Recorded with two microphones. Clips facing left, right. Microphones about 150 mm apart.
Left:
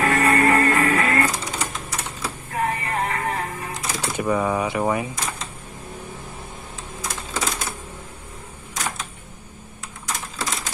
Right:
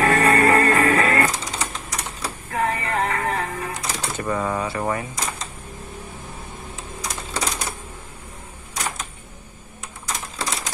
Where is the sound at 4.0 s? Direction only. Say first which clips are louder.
Left 3 dB; 10° left (ahead or behind).